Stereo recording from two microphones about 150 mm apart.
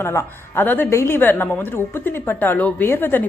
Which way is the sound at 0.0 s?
15° left (ahead or behind).